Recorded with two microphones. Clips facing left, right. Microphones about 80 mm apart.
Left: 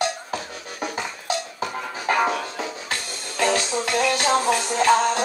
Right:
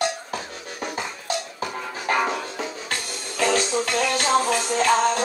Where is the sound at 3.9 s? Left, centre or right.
Centre.